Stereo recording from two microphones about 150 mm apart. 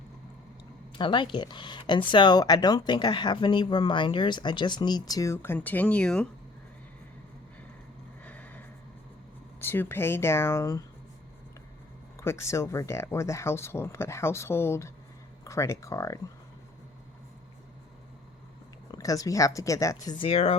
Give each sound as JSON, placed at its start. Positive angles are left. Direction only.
{"t": 0.9, "sound": "speech", "side_deg": 35}
{"t": 8.2, "sound": "a sound", "side_deg": 10}
{"t": 9.6, "sound": "speech", "side_deg": 15}
{"t": 12.2, "sound": "speech", "side_deg": 20}
{"t": 18.9, "sound": "speech", "side_deg": 25}
{"t": 20.1, "sound": "speech", "side_deg": 40}